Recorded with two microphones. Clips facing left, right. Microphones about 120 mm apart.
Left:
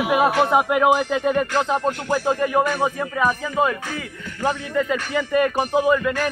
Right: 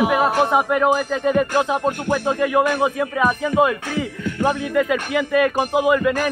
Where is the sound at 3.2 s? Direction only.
20° right (ahead or behind).